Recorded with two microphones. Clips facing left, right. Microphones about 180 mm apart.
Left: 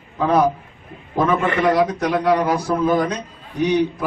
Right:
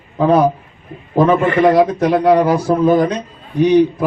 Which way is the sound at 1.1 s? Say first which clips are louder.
Right 6 dB; 30° right (ahead or behind).